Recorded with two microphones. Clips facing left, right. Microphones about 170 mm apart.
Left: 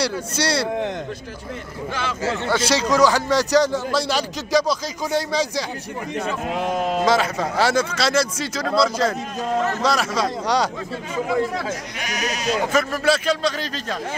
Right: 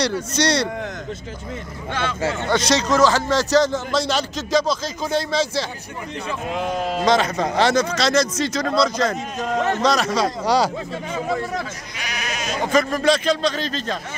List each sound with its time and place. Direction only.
0.0 s speech: 5° left (ahead or behind)
2.5 s a man's voice: 10° left (ahead or behind)
12.0 s speech: 40° left (ahead or behind)
12.7 s a man's voice: 5° left (ahead or behind)